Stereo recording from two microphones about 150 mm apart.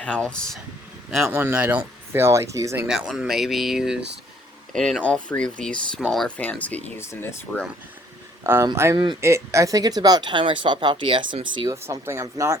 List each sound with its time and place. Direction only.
0.0 s speech: 5° left (ahead or behind)
1.3 s speech: 15° right (ahead or behind)
2.8 s speech: 5° right (ahead or behind); by 7.6 s 15° left (ahead or behind)
8.4 s speech: 15° right (ahead or behind); by 11.7 s 35° right (ahead or behind)
11.7 s speech: 20° right (ahead or behind)